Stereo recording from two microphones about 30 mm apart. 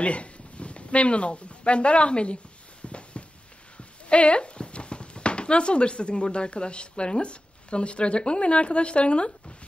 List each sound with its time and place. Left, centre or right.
0.0 s speech: left
2.8 s a sound: left
3.7 s speech: left